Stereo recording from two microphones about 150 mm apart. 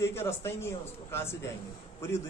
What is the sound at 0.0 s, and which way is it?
A man's voice, 15° left (ahead or behind).